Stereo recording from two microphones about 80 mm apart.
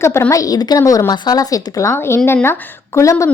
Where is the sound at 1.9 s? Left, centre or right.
Left.